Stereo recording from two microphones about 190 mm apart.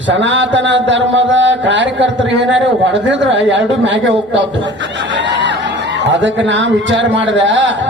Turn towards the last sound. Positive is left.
turn(degrees=-75)  # may be behind; listen again after turning